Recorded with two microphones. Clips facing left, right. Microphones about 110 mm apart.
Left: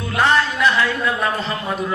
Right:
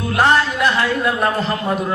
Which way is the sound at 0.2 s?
40° right (ahead or behind).